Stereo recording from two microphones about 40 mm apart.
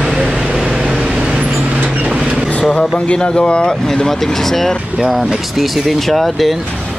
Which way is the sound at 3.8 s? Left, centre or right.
Centre.